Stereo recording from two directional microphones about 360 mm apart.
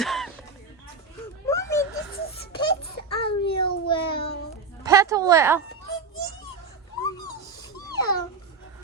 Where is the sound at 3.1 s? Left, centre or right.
Centre.